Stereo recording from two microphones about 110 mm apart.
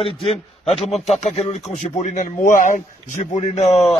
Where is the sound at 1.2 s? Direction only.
75° left (ahead or behind).